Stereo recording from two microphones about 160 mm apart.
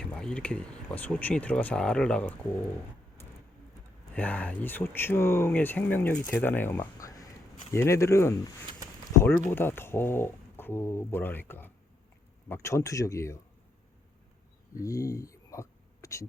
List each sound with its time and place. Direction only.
0.0 s speech: 5° left (ahead or behind)
4.1 s speech: 10° left (ahead or behind)
9.5 s speech: 15° left (ahead or behind)
14.8 s a sound: 20° left (ahead or behind)